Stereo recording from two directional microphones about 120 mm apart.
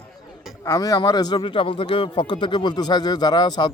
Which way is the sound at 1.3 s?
45° left (ahead or behind).